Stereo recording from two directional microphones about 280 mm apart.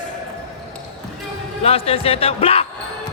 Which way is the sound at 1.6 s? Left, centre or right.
Left.